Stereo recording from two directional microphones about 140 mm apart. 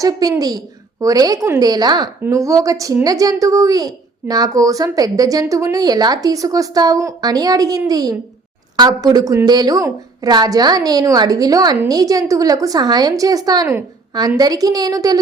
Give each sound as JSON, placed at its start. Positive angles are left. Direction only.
{"t": 0.0, "sound": "a woman's voice", "side_deg": -25}